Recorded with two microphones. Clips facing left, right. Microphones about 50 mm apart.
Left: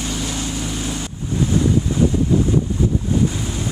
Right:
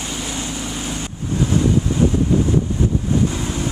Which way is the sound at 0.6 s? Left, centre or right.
Centre.